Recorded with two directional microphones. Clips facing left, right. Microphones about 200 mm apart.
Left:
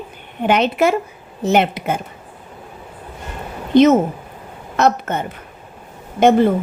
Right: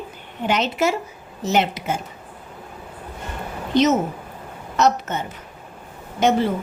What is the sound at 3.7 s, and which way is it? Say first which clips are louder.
A woman's voice: left 6 dB; 55° left (ahead or behind).